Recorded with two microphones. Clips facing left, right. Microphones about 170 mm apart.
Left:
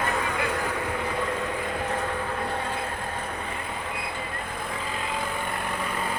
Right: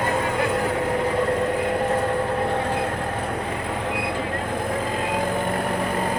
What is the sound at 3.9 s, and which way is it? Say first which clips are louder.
Vehicle: right 8 dB; 70° right (ahead or behind).